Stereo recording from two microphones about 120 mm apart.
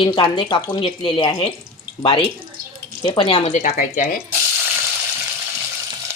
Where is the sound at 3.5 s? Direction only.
90° left.